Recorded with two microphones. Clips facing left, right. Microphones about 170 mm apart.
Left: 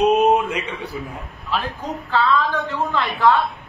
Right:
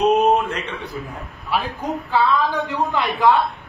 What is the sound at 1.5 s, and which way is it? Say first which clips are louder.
A woman's voice: right 2 dB; 10° right (ahead or behind).